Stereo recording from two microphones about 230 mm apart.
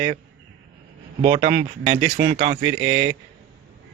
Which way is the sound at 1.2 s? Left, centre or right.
Right.